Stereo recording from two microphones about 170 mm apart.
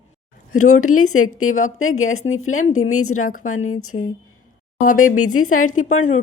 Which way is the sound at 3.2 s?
50° left (ahead or behind).